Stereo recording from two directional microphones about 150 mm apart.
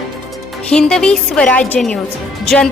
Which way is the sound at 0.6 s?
5° left (ahead or behind).